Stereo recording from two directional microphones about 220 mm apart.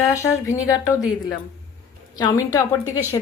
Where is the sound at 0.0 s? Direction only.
15° left (ahead or behind).